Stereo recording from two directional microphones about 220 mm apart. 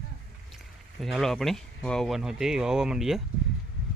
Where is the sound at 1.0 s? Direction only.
Centre (ahead or behind).